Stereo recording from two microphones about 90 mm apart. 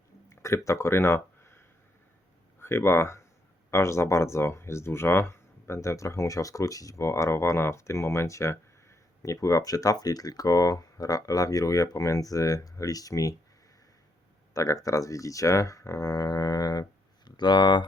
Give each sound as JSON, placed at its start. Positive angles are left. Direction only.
{"t": 0.3, "sound": "a sound", "side_deg": 35}
{"t": 2.6, "sound": "speech", "side_deg": 30}
{"t": 14.5, "sound": "speech", "side_deg": 40}